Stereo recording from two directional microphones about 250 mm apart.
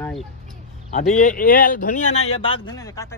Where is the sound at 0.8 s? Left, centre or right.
Left; by 3.2 s centre.